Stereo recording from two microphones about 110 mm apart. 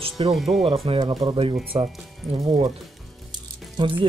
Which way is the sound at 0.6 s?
50° right (ahead or behind).